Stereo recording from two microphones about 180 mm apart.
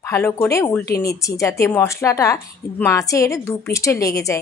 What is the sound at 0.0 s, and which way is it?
A woman's voice, 15° left (ahead or behind).